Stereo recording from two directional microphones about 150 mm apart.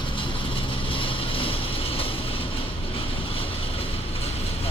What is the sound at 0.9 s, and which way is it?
Vehicle, 35° left (ahead or behind).